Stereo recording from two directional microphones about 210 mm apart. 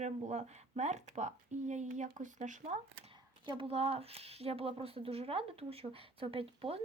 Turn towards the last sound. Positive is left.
turn(degrees=-25)  # may be behind; listen again after turning